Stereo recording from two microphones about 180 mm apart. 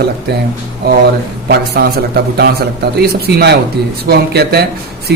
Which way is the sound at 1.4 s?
60° right (ahead or behind).